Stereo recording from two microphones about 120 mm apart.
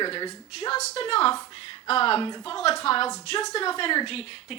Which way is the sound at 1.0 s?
50° left (ahead or behind).